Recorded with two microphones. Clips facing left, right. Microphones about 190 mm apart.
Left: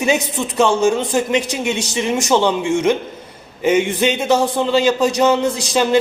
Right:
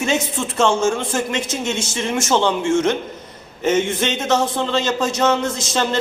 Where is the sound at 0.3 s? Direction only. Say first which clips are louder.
Left 2 dB; 15° left (ahead or behind).